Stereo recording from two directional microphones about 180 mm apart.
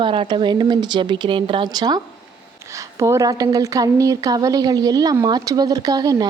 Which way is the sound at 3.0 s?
20° right (ahead or behind).